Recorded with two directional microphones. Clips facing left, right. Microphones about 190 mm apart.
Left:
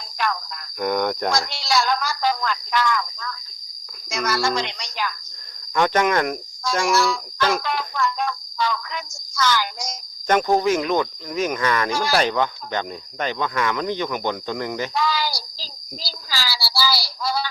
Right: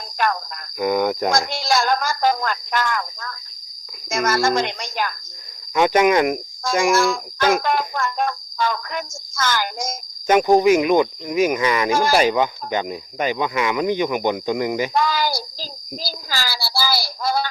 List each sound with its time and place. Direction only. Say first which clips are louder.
0.2 s cricket: right 4 dB; 50° right (ahead or behind)
0.8 s speech: right 3 dB; 5° right (ahead or behind)
1.3 s speech: right 3 dB; 50° right (ahead or behind)
5.7 s speech: right 4 dB; 10° right (ahead or behind)
6.8 s speech: right 3 dB; 50° right (ahead or behind)
10.2 s speech: right 4 dB; 10° right (ahead or behind)
11.9 s speech: right 5 dB; 50° right (ahead or behind)
12.1 s speech: right 3 dB; 10° right (ahead or behind)
14.9 s speech: right 3 dB; 50° right (ahead or behind)